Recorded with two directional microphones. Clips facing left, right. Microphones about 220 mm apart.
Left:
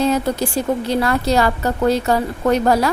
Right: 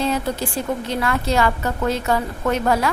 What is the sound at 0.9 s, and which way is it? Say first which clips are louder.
A woman's voice: left 4 dB; 35° left (ahead or behind).